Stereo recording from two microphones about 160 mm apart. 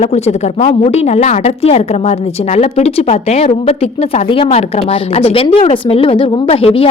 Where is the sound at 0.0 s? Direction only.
40° left (ahead or behind).